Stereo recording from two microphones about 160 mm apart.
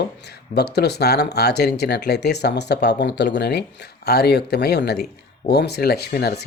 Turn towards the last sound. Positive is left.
turn(degrees=80)